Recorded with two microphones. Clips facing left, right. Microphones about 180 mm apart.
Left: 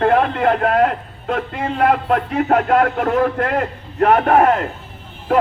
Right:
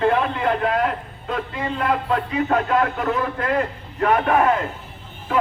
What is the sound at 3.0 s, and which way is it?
A man's voice, 45° left (ahead or behind).